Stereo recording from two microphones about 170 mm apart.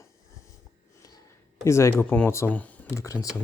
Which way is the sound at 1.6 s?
15° left (ahead or behind).